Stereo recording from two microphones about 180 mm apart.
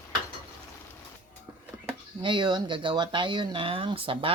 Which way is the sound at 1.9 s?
25° right (ahead or behind).